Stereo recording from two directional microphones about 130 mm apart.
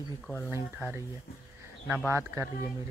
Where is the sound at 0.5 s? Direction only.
20° right (ahead or behind).